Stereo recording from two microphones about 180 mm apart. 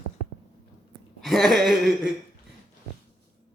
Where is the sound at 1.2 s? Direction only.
Centre (ahead or behind).